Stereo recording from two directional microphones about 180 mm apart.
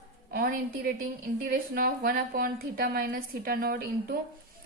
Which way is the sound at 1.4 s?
55° right (ahead or behind).